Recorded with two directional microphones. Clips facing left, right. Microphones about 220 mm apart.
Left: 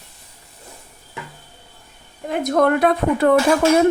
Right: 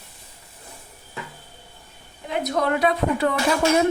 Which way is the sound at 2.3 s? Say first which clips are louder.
Left 6 dB; 50° left (ahead or behind).